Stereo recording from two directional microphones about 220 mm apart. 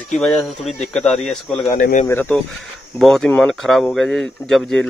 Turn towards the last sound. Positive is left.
turn(degrees=0)  # may be behind; listen again after turning